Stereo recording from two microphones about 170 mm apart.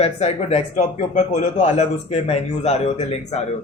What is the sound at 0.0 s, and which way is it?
Speech, 40° left (ahead or behind).